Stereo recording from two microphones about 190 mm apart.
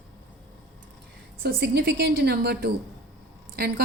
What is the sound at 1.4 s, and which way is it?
A woman's voice, 60° right (ahead or behind).